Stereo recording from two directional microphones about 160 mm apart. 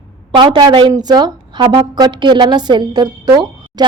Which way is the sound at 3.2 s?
25° right (ahead or behind).